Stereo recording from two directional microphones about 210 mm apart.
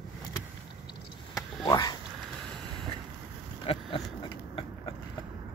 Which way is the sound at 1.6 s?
15° left (ahead or behind).